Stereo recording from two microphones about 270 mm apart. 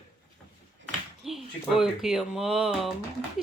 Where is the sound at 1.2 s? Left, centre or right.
Centre.